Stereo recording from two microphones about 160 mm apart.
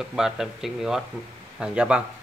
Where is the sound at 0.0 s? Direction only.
Centre (ahead or behind).